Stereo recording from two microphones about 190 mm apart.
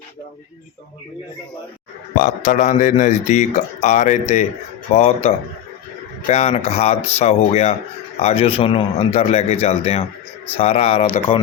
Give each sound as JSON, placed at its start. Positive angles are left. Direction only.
{"t": 2.1, "sound": "speech", "side_deg": 45}